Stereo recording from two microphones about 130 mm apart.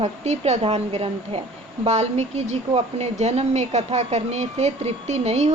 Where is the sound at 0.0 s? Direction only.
60° right (ahead or behind).